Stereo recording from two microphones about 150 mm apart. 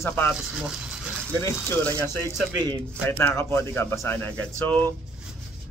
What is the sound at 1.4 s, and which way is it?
Speech, 10° left (ahead or behind).